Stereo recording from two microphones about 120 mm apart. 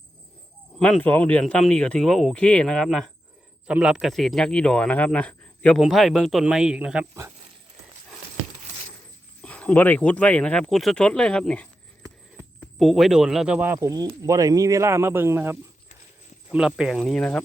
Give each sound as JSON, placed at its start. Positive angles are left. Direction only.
{"t": 0.8, "sound": "speech", "side_deg": 5}
{"t": 3.7, "sound": "a man's voice", "side_deg": -10}
{"t": 9.4, "sound": "speech", "side_deg": 10}
{"t": 13.7, "sound": "a man's voice", "side_deg": -35}
{"t": 16.5, "sound": "a man's voice", "side_deg": -5}
{"t": 17.2, "sound": "speech", "side_deg": 5}